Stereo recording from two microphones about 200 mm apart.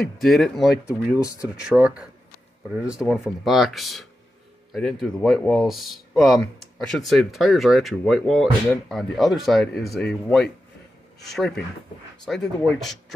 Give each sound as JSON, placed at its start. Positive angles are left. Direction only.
{"t": 0.2, "sound": "speech", "side_deg": 0}
{"t": 1.2, "sound": "speech", "side_deg": 15}
{"t": 1.5, "sound": "speech", "side_deg": -5}
{"t": 11.2, "sound": "speech", "side_deg": 0}